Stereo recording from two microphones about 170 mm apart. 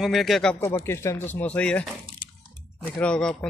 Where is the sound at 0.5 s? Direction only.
15° left (ahead or behind).